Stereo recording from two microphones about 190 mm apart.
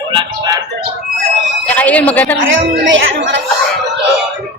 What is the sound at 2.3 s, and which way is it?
A woman's voice, 85° right.